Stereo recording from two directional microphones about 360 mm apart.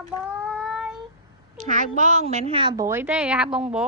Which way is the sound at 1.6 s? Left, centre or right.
Right.